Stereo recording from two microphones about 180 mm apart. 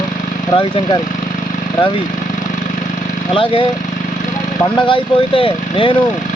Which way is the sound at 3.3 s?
30° left (ahead or behind).